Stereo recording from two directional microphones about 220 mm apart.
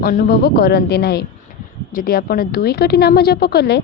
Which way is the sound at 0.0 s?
40° left (ahead or behind).